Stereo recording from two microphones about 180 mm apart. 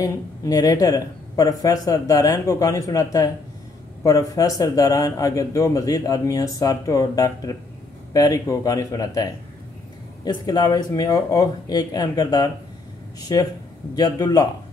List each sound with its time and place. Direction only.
0.0 s a man's voice: 20° left (ahead or behind)